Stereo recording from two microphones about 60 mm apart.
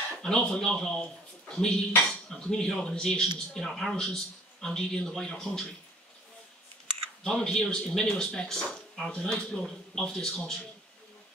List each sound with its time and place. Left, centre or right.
0.2 s speech: centre
7.2 s speech: centre